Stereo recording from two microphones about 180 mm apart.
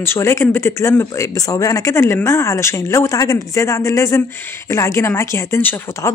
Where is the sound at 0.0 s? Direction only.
15° left (ahead or behind).